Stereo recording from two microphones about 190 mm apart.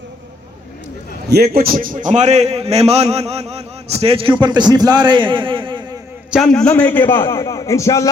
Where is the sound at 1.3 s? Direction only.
55° right (ahead or behind); by 5.7 s 25° right (ahead or behind).